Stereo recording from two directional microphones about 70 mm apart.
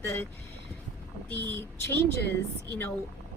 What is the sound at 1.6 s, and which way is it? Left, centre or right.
Speech, left.